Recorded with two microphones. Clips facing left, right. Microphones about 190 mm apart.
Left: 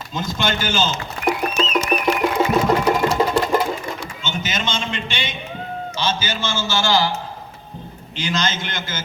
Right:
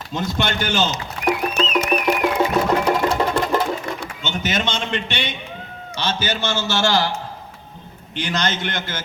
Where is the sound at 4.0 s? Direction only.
65° right (ahead or behind).